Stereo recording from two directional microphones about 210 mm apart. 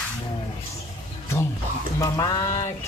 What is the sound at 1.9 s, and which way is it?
Speech, 15° left (ahead or behind).